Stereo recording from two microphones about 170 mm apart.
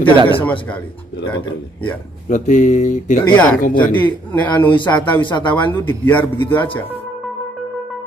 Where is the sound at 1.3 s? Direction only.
30° left (ahead or behind).